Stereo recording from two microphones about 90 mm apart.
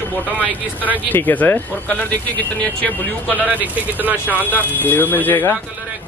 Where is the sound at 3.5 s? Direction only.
20° right (ahead or behind).